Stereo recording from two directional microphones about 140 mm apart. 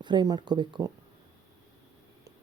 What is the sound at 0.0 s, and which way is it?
Speech, 30° right (ahead or behind).